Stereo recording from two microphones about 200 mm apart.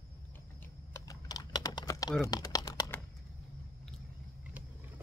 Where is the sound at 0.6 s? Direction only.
15° left (ahead or behind).